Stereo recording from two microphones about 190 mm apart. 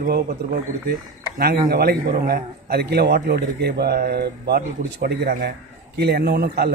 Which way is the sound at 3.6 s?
55° right (ahead or behind).